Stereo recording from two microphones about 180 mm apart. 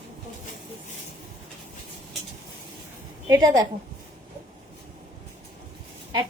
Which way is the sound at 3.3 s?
20° right (ahead or behind).